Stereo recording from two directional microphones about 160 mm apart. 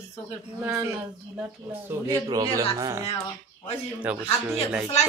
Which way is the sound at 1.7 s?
20° right (ahead or behind).